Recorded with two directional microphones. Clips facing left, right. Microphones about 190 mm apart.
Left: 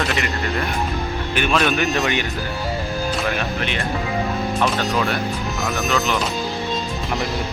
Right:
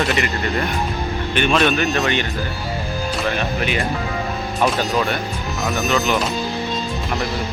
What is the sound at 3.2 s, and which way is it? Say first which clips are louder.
Speech: right 2 dB; 5° right (ahead or behind).